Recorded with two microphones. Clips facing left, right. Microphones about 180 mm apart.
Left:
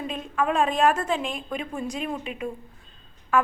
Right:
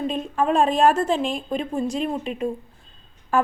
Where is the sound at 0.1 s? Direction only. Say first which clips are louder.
Right 2 dB; 30° right (ahead or behind).